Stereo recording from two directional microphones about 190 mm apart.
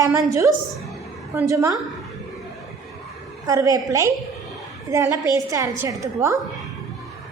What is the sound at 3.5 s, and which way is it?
A woman's voice, 20° right (ahead or behind).